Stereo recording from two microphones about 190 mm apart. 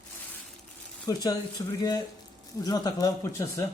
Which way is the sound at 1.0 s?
20° left (ahead or behind).